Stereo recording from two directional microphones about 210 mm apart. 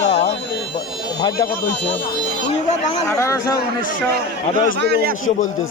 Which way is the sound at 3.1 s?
15° left (ahead or behind).